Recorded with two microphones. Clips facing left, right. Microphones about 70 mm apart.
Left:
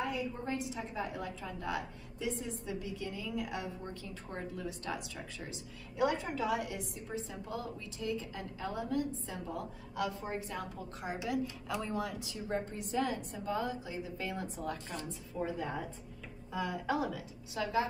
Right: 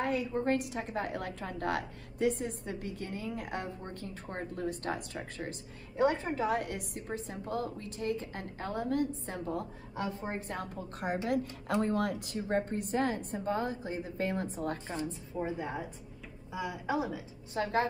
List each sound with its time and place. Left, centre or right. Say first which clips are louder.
0.0 s a woman's voice: right 5 dB; right
5.9 s a woman's voice: right 3 dB; right
6.6 s a woman's voice: right 2 dB; right
9.9 s a woman's voice: even; right
10.5 s a woman's voice: right 2 dB; right
14.9 s a woman's voice: right 5 dB; right
17.6 s a woman's voice: right 2 dB; right